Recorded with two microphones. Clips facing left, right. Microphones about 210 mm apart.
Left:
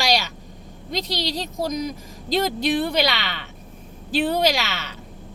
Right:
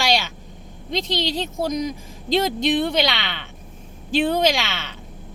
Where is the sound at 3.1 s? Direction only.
40° left (ahead or behind).